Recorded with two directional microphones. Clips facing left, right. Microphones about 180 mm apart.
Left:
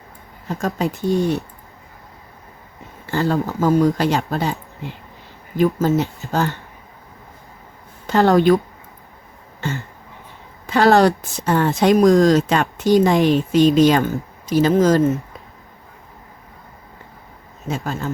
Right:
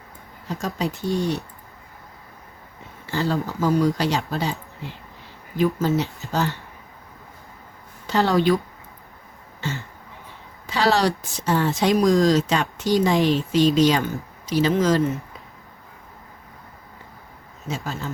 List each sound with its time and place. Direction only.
0.4 s speech: 50° left (ahead or behind)
1.1 s speech: 20° left (ahead or behind)
3.1 s speech: 55° left (ahead or behind)
3.3 s speech: 45° left (ahead or behind)
8.0 s a woman's voice: 55° left (ahead or behind)
9.6 s speech: 50° left (ahead or behind)
17.7 s speech: 55° left (ahead or behind)